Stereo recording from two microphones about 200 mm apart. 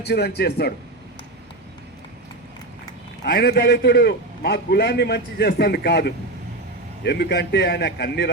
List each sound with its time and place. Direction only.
0.0 s a man's voice: 55° left (ahead or behind)
3.2 s a man's voice: 55° left (ahead or behind)